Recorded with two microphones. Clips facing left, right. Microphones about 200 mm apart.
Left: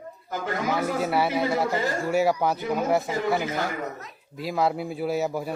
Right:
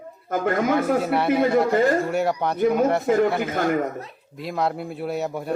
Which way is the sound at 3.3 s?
55° right (ahead or behind).